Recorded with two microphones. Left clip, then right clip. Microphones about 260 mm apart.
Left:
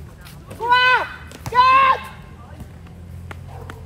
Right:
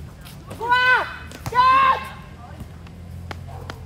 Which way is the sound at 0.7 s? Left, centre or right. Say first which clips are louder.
Left 2 dB; left.